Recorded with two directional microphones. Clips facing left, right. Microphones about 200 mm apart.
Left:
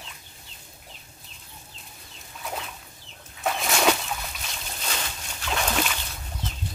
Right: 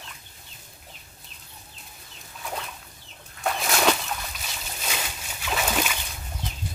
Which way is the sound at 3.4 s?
Centre (ahead or behind).